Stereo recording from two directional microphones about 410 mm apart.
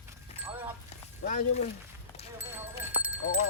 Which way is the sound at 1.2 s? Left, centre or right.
Centre.